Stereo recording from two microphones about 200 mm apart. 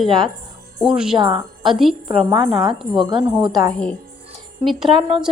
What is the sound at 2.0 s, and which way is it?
A woman's voice, 25° right (ahead or behind).